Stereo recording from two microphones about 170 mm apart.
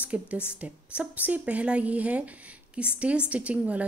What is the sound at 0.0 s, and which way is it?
A woman's voice, 10° right (ahead or behind).